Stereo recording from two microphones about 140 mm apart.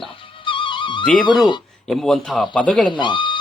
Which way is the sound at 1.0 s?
5° left (ahead or behind).